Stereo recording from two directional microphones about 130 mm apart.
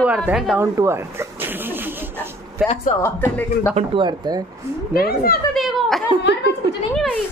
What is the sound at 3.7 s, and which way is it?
Speech, 40° right (ahead or behind).